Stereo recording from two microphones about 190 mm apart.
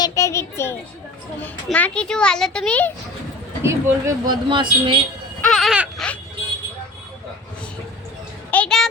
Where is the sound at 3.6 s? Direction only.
20° right (ahead or behind).